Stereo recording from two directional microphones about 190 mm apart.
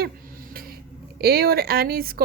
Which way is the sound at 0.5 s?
50° right (ahead or behind).